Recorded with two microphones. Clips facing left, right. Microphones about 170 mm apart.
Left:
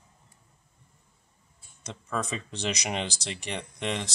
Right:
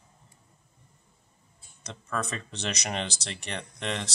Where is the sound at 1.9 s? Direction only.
10° left (ahead or behind).